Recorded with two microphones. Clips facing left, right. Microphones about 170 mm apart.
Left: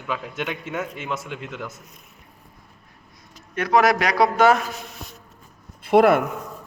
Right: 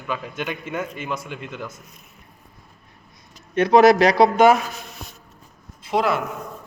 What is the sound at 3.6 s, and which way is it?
Speech, 25° right (ahead or behind).